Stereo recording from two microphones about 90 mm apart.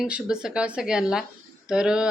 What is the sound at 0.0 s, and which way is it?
Speech, 5° right (ahead or behind).